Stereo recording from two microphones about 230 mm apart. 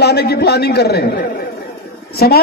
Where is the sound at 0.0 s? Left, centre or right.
Left.